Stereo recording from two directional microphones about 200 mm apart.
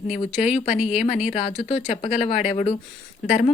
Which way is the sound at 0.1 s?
35° left (ahead or behind).